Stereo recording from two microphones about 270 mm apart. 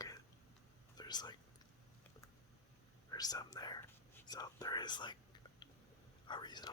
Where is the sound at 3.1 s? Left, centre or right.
Centre.